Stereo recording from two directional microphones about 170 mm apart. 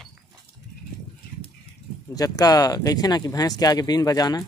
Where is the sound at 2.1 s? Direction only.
20° left (ahead or behind).